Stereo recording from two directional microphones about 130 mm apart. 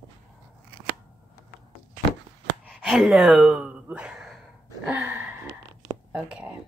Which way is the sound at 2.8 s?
Centre (ahead or behind).